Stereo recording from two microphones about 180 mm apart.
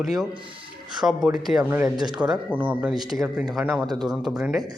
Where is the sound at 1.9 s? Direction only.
25° right (ahead or behind).